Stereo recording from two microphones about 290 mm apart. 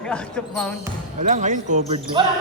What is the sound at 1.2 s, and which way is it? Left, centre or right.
Speech, right.